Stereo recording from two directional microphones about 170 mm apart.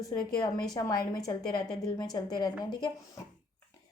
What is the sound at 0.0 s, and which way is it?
Speech, 20° left (ahead or behind).